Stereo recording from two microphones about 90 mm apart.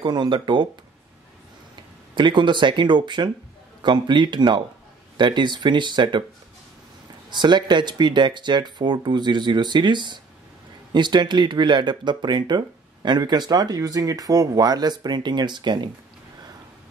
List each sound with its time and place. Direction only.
0.0 s speech: 55° right (ahead or behind)
2.1 s speech: 60° right (ahead or behind)
7.2 s speech: 55° right (ahead or behind)